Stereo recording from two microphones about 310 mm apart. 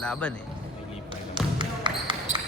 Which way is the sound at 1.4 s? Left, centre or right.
Centre.